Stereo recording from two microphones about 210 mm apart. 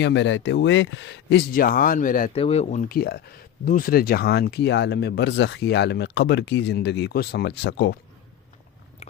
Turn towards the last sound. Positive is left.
turn(degrees=55)  # may be behind; listen again after turning